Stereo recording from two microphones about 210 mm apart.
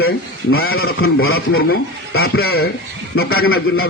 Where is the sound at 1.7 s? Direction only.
50° left (ahead or behind).